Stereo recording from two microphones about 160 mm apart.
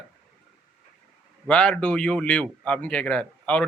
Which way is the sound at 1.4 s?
10° left (ahead or behind).